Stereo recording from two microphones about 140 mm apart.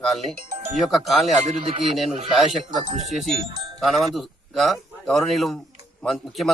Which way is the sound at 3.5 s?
35° right (ahead or behind).